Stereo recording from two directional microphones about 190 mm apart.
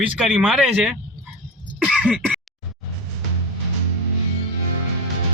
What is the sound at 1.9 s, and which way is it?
Throat clearing, 5° right (ahead or behind).